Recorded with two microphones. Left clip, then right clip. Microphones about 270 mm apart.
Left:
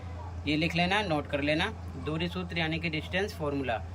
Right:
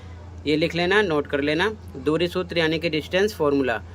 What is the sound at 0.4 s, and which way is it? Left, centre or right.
Speech, centre.